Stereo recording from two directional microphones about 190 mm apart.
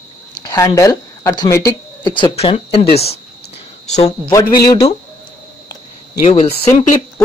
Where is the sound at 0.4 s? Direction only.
20° left (ahead or behind).